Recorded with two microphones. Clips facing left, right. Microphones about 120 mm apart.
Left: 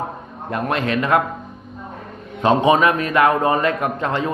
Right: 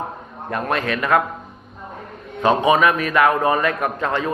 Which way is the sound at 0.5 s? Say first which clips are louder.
Left 2 dB; 20° left (ahead or behind).